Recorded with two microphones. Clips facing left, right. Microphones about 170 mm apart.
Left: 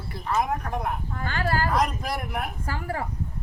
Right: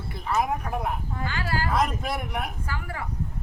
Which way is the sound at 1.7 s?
Centre (ahead or behind).